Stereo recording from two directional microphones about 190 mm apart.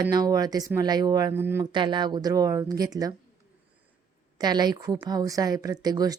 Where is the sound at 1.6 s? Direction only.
25° right (ahead or behind).